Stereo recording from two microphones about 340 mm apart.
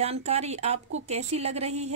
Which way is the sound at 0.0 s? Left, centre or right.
Centre.